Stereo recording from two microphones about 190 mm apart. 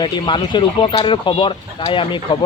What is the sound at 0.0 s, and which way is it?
Speech, 25° left (ahead or behind).